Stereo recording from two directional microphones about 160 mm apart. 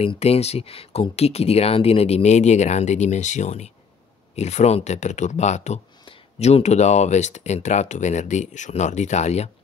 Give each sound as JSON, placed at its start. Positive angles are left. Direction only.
{"t": 0.0, "sound": "speech", "side_deg": 40}